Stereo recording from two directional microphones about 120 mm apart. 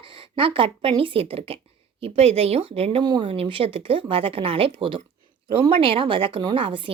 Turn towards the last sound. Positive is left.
turn(degrees=-50)  # may be behind; listen again after turning